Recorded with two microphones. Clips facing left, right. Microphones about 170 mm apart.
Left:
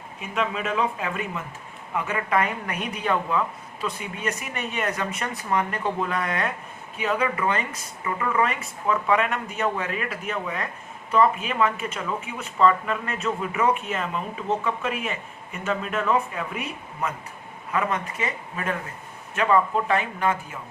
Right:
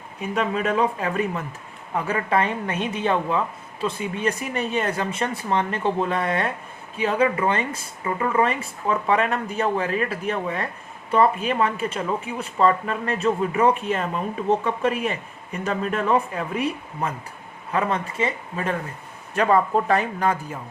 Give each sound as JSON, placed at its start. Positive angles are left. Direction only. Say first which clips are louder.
{"t": 0.2, "sound": "a woman's voice", "louder": "right 4 dB", "side_deg": -40}